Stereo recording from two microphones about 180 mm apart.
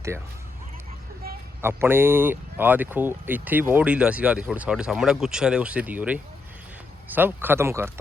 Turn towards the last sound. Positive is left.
turn(degrees=-15)  # may be behind; listen again after turning